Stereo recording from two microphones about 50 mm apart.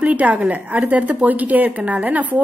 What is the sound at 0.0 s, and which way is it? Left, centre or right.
Speech, right.